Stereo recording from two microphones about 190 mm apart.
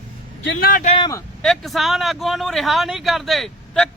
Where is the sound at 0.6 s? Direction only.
50° left (ahead or behind).